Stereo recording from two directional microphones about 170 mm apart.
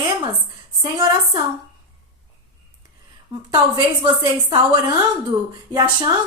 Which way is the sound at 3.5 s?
25° right (ahead or behind).